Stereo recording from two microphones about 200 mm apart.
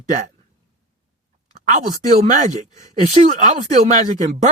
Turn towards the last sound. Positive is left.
turn(degrees=-40)  # may be behind; listen again after turning